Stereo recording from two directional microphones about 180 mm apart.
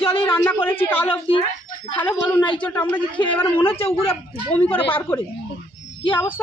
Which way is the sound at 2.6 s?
10° left (ahead or behind).